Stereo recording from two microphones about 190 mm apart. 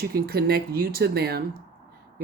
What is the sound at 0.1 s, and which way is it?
Speech, 55° right (ahead or behind).